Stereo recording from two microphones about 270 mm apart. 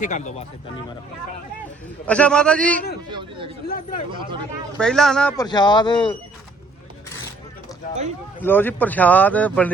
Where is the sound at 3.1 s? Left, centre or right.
Centre.